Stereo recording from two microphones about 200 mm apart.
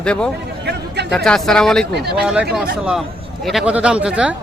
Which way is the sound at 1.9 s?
55° right (ahead or behind).